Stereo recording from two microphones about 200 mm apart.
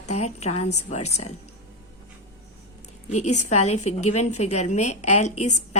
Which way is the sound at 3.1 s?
35° left (ahead or behind).